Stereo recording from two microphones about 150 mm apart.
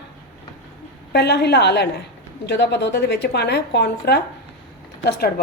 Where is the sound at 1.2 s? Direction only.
90° left.